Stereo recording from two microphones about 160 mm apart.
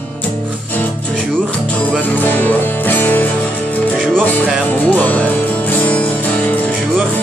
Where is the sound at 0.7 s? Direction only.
10° left (ahead or behind).